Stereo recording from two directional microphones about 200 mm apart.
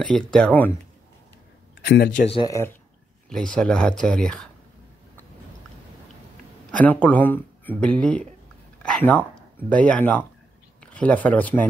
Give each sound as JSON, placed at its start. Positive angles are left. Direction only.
{"t": 0.0, "sound": "speech", "side_deg": 5}
{"t": 1.9, "sound": "speech", "side_deg": 50}
{"t": 2.2, "sound": "speech", "side_deg": 25}
{"t": 3.3, "sound": "speech", "side_deg": 5}
{"t": 6.7, "sound": "speech", "side_deg": 5}